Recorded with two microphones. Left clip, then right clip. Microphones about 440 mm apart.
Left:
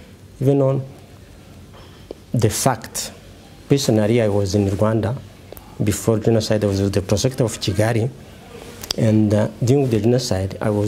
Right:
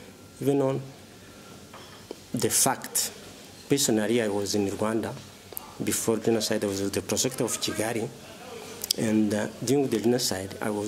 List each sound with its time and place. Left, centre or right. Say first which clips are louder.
0.5 s speech: left 7 dB; left
2.3 s speech: left 6 dB; left